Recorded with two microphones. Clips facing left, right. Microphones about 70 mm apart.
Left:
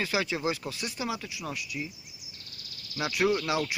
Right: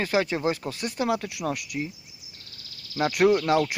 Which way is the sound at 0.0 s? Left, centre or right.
Right.